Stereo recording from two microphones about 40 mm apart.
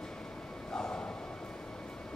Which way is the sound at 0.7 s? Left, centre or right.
Centre.